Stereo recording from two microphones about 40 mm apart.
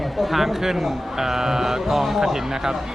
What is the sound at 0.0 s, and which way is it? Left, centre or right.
Speech, centre.